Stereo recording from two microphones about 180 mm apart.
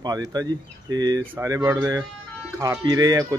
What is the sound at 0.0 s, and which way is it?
Speech, 20° right (ahead or behind).